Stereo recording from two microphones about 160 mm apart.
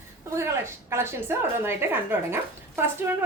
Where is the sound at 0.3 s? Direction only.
15° right (ahead or behind).